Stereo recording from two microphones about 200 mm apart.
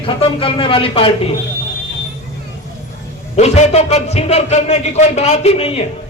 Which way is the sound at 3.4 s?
35° left (ahead or behind).